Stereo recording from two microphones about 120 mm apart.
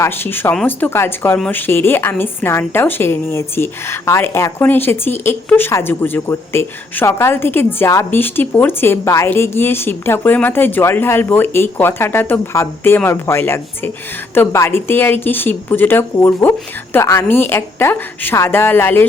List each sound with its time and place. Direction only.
0.0 s a woman's voice: 20° left (ahead or behind)
0.5 s speech: 5° left (ahead or behind)
0.9 s a woman's voice: 20° left (ahead or behind)